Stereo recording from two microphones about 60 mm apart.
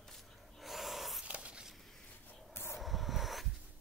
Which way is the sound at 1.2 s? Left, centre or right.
Centre.